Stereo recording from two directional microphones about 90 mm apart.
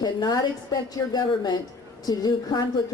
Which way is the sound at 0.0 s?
50° left (ahead or behind).